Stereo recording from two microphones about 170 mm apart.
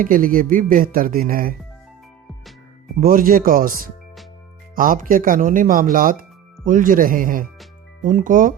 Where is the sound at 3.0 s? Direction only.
55° right (ahead or behind).